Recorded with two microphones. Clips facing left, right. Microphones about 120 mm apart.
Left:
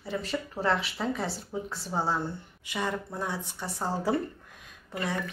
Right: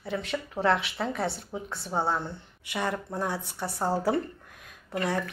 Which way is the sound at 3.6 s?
30° right (ahead or behind).